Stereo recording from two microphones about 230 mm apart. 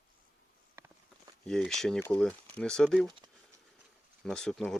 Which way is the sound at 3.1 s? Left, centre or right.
Centre.